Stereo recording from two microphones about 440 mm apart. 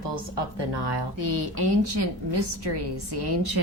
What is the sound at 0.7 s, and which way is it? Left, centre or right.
A woman's voice, right.